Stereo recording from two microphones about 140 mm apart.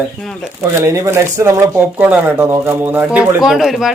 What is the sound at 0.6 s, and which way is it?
Speech, 20° right (ahead or behind).